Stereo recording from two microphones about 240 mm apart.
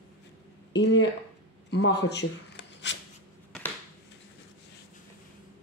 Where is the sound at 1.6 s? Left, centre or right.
Left.